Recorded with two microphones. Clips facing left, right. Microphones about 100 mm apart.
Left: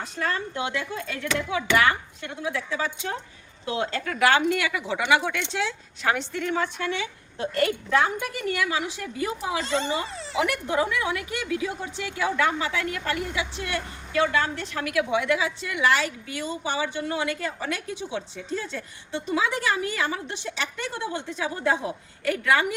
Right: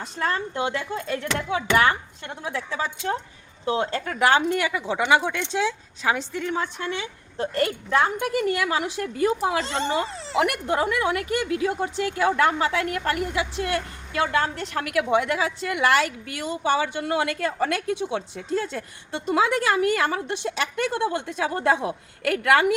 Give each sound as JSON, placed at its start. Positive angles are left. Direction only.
{"t": 0.3, "sound": "a woman's voice", "side_deg": -45}
{"t": 5.5, "sound": "a woman's voice", "side_deg": -15}
{"t": 7.3, "sound": "a woman's voice", "side_deg": -35}